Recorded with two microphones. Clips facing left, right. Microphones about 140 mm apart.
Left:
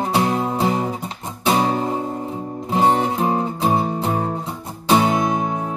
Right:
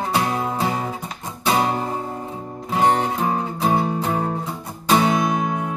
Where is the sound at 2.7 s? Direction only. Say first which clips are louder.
Left 1 dB; 30° left (ahead or behind).